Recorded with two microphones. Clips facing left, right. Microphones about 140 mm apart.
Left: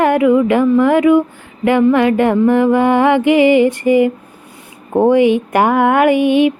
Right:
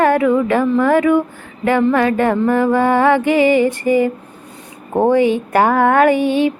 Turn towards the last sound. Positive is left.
turn(degrees=15)  # may be behind; listen again after turning